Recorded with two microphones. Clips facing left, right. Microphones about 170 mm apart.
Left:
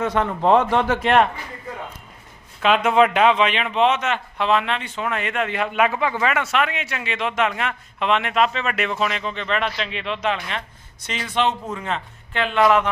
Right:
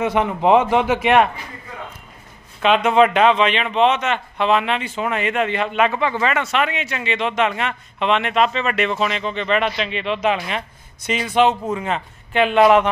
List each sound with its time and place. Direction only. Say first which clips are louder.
0.0 s speech: right 2 dB; 10° right (ahead or behind)
2.6 s a man's voice: right 2 dB; 5° left (ahead or behind); by 12.9 s 20° right (ahead or behind)